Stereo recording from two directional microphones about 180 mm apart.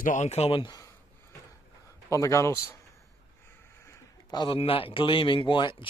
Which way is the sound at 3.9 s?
25° left (ahead or behind).